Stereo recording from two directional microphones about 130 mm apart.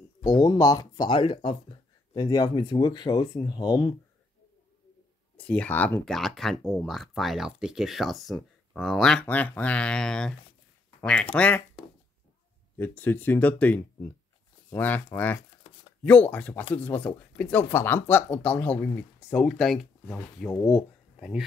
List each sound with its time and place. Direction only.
0.2 s speech: 30° left (ahead or behind)
5.4 s speech: 10° left (ahead or behind)
6.0 s speech: centre (ahead or behind)
12.7 s speech: 15° left (ahead or behind); by 21.5 s 5° right (ahead or behind)